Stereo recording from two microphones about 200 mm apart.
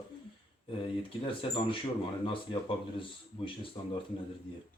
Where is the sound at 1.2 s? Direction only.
25° left (ahead or behind).